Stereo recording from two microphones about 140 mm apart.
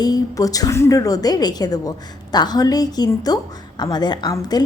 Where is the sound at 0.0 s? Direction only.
25° left (ahead or behind).